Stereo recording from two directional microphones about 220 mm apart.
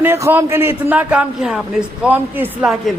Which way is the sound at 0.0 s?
10° right (ahead or behind).